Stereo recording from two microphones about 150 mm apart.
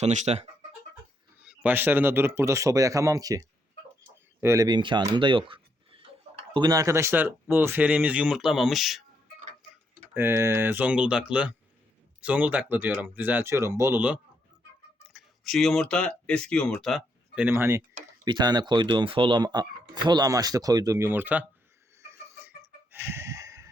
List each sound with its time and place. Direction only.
0.0 s speech: 50° right (ahead or behind)
1.4 s speech: 10° right (ahead or behind)
10.2 s speech: 15° right (ahead or behind)
18.3 s speech: 25° right (ahead or behind); by 21.4 s 10° right (ahead or behind)
22.4 s chicken: 15° right (ahead or behind)